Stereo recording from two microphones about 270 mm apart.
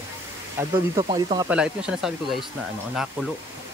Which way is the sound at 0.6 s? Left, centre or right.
Centre.